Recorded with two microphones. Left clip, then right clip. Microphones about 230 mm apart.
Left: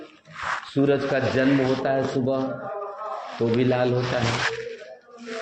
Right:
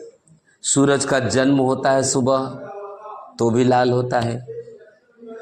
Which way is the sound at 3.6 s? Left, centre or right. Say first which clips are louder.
Right 7 dB; right.